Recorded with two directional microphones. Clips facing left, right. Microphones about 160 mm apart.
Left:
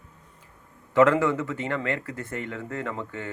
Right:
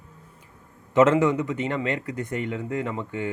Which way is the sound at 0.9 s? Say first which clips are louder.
Right 1 dB; 20° right (ahead or behind).